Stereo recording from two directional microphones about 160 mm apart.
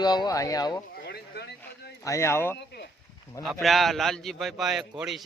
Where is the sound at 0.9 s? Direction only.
90° left.